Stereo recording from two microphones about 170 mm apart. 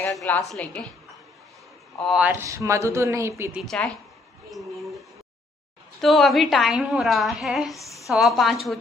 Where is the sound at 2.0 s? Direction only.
5° right (ahead or behind).